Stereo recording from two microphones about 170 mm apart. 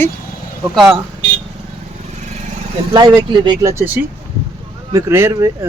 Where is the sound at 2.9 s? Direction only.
25° right (ahead or behind).